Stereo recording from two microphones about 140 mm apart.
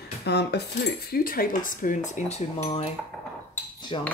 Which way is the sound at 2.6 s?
45° left (ahead or behind).